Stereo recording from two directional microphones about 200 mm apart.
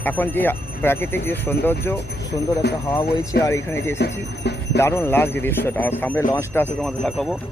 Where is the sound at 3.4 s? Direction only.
15° left (ahead or behind).